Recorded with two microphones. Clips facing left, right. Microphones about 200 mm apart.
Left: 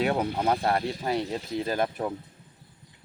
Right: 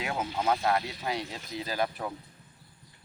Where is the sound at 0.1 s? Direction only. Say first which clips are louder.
Left 6 dB; 60° left (ahead or behind).